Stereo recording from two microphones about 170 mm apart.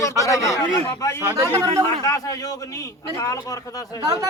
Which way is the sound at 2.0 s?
20° left (ahead or behind).